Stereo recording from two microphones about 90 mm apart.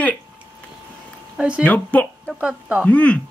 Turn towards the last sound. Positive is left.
turn(degrees=15)  # may be behind; listen again after turning